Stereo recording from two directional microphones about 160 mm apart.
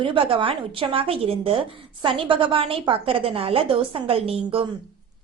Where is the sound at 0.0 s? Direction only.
35° right (ahead or behind).